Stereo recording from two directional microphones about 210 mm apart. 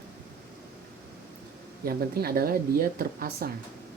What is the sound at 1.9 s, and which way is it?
Speech, 45° right (ahead or behind).